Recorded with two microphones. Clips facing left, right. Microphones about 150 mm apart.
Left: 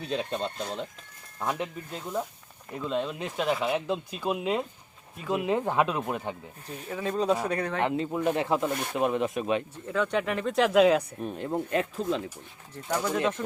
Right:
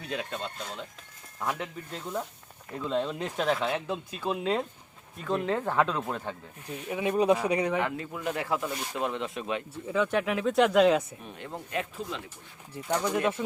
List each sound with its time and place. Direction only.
0.0 s speech: 25° left (ahead or behind)
1.4 s speech: 20° left (ahead or behind)
2.7 s speech: 5° left (ahead or behind)
6.9 s speech: 15° right (ahead or behind)
7.8 s speech: 25° left (ahead or behind)
8.7 s speech: 60° left (ahead or behind)
9.0 s speech: 20° left (ahead or behind)
9.8 s speech: 5° right (ahead or behind)
11.2 s speech: 35° left (ahead or behind)
12.7 s speech: 10° right (ahead or behind)